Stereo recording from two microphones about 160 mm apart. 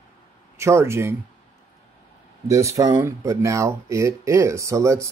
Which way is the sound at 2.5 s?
20° right (ahead or behind).